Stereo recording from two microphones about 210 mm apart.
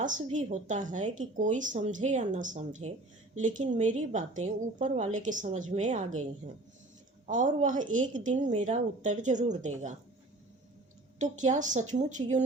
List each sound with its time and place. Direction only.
0.0 s a woman's voice: 35° right (ahead or behind)
11.2 s a woman's voice: 35° right (ahead or behind)